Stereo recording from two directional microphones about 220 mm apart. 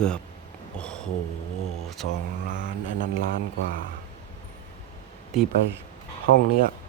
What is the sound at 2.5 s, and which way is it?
Mantra, 35° right (ahead or behind).